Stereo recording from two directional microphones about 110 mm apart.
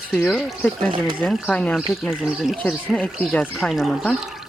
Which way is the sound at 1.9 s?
Centre (ahead or behind).